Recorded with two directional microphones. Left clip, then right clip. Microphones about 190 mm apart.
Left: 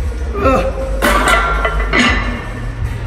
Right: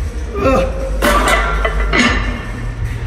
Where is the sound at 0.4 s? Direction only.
5° left (ahead or behind).